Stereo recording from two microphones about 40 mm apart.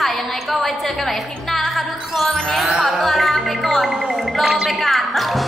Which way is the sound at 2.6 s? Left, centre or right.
Centre.